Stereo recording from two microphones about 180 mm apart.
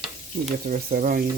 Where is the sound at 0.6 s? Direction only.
55° right (ahead or behind).